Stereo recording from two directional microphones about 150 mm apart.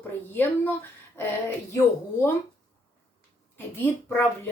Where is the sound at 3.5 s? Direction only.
15° left (ahead or behind).